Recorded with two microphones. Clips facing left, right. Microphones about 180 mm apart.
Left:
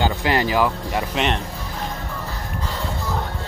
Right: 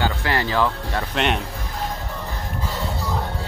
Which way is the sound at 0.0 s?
20° left (ahead or behind).